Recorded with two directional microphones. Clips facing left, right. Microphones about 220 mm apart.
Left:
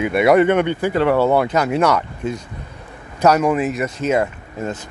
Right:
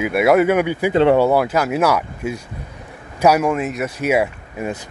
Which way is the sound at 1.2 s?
5° right (ahead or behind).